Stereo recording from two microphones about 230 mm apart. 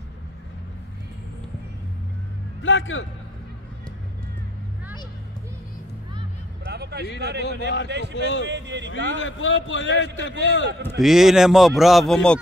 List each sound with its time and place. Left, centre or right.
2.6 s speech: left
6.6 s a sound: right
7.2 s speech: right
8.1 s speech: left
8.5 s speech: right
9.2 s speech: left
11.0 s speech: centre